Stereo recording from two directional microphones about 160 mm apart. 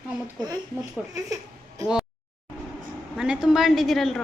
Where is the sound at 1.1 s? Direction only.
20° right (ahead or behind).